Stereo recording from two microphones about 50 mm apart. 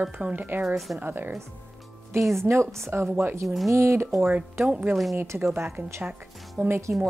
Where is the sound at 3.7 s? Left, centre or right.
Right.